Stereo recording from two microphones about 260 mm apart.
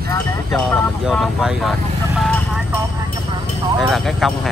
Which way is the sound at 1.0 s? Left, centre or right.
Centre.